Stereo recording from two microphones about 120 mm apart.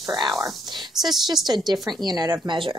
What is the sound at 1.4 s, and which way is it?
Speech, 35° right (ahead or behind).